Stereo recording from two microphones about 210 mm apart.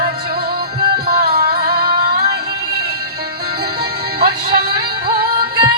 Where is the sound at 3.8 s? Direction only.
50° right (ahead or behind).